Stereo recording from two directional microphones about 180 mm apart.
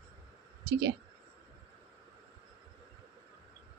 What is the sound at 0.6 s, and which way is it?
Speech, 70° right (ahead or behind).